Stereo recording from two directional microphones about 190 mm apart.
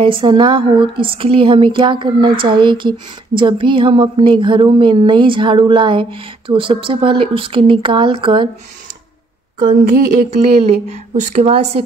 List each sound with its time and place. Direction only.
0.0 s speech: 25° right (ahead or behind)
9.6 s a woman's voice: 50° right (ahead or behind)
10.6 s a woman's voice: 35° right (ahead or behind)